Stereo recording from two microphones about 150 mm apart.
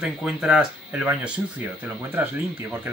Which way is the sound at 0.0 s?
5° right (ahead or behind).